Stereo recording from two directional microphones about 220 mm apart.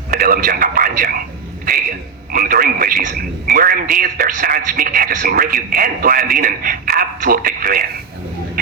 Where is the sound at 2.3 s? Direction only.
40° right (ahead or behind).